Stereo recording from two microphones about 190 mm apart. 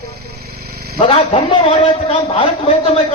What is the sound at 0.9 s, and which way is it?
A man's voice, 30° left (ahead or behind).